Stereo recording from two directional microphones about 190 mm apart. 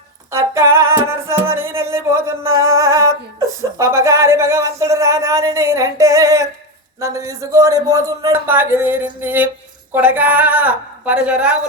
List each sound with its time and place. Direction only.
0.3 s music: 15° right (ahead or behind)
3.6 s speech: 15° right (ahead or behind)